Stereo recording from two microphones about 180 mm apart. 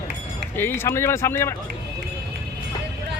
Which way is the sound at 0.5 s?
10° left (ahead or behind).